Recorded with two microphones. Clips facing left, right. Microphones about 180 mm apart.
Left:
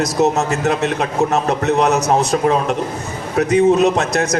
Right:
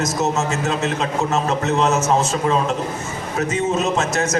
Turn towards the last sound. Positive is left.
turn(degrees=60)  # may be behind; listen again after turning